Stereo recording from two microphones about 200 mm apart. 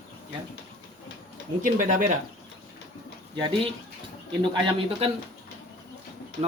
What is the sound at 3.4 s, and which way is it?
Speech, 25° right (ahead or behind).